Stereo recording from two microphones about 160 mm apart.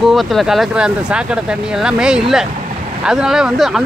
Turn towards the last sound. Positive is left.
turn(degrees=0)  # may be behind; listen again after turning